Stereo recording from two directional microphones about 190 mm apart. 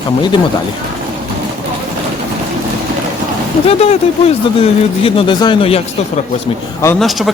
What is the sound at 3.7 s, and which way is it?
A man's voice, 35° left (ahead or behind).